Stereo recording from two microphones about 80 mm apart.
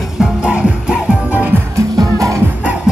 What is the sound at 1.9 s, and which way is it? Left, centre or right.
Music, right.